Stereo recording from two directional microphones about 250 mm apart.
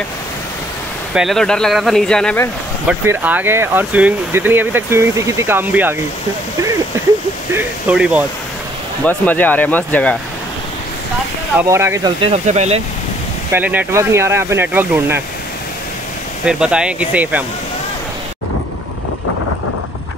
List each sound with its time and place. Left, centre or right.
1.1 s speech: centre
2.9 s speech: centre
7.5 s speech: centre
9.0 s speech: centre
11.7 s speech: centre; by 12.8 s right
13.5 s speech: centre
16.4 s speech: centre